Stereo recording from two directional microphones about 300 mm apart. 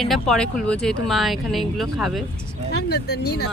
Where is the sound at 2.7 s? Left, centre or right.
Left.